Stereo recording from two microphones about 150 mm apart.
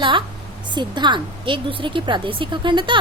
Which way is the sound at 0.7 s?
30° right (ahead or behind).